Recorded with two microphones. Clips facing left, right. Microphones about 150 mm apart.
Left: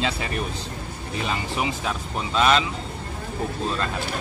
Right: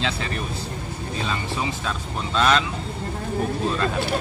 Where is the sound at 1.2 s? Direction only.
15° left (ahead or behind).